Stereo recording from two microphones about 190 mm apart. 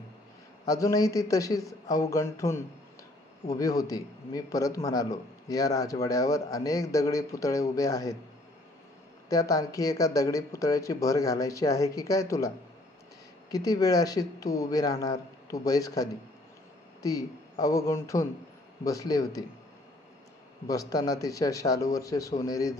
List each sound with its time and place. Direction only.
0.7 s a man's voice: 20° left (ahead or behind)
9.3 s a man's voice: 20° left (ahead or behind)
20.9 s a man's voice: 20° left (ahead or behind)